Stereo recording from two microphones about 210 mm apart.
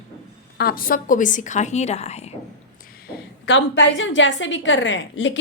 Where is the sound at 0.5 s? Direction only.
45° left (ahead or behind).